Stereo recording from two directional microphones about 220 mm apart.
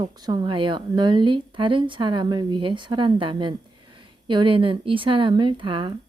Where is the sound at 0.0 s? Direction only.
20° right (ahead or behind).